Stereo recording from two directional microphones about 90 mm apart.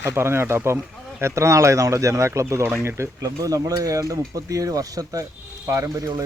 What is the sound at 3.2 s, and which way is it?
Speech, 40° right (ahead or behind).